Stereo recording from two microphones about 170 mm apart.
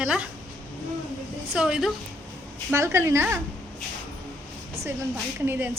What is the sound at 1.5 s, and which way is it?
Speech, 5° right (ahead or behind).